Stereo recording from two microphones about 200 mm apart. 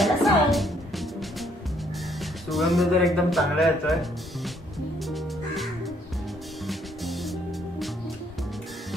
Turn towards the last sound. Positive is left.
turn(degrees=0)  # may be behind; listen again after turning